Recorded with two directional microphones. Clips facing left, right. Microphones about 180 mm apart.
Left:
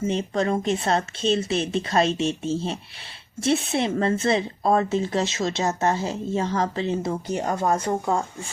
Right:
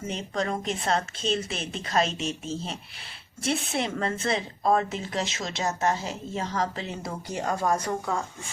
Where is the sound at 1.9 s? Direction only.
30° left (ahead or behind).